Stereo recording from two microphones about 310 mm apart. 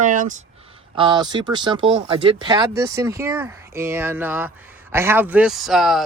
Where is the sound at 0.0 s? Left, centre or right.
Right.